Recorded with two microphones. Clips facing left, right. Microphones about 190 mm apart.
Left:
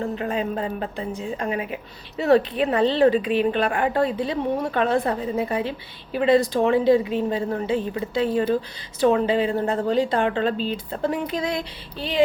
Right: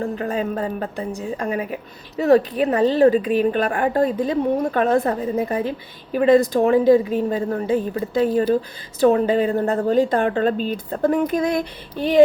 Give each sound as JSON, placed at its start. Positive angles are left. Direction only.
{"t": 0.2, "sound": "a woman's voice", "side_deg": -40}